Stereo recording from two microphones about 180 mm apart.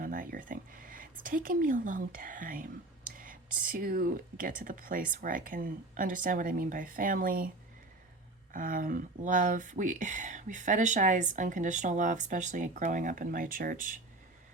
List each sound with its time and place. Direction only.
0.0 s speech: 50° right (ahead or behind)
8.5 s speech: 50° right (ahead or behind)